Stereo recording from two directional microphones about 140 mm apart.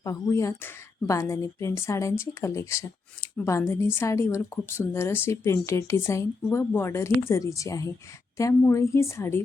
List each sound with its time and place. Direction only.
0.0 s a woman's voice: 25° left (ahead or behind)